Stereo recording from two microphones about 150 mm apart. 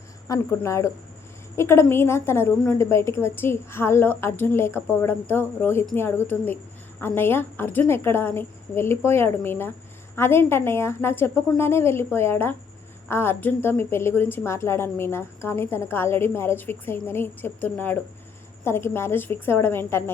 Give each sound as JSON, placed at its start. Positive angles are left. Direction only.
{"t": 0.3, "sound": "a woman's voice", "side_deg": 20}